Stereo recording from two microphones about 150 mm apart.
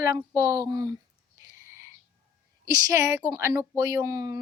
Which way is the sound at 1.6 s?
20° right (ahead or behind).